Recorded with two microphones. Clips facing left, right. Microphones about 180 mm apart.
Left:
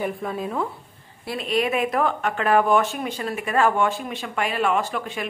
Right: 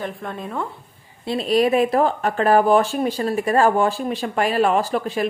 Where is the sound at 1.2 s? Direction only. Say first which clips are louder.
Right 6 dB; 30° right (ahead or behind).